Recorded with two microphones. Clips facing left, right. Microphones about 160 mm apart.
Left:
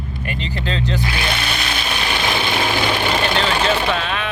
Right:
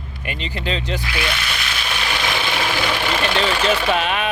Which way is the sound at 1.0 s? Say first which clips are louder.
Left 2 dB; 30° left (ahead or behind).